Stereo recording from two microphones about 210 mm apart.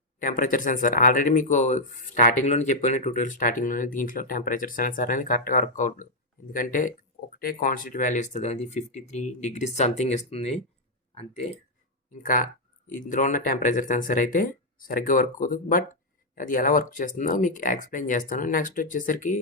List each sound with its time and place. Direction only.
0.2 s speech: 40° left (ahead or behind)
12.2 s speech: 40° left (ahead or behind)